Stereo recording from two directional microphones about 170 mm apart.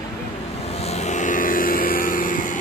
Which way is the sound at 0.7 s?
40° left (ahead or behind).